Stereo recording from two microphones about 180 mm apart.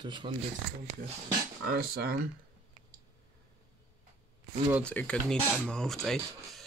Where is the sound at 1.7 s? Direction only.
60° right (ahead or behind).